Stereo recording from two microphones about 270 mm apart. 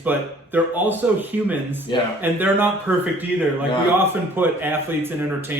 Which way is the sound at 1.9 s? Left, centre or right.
Centre.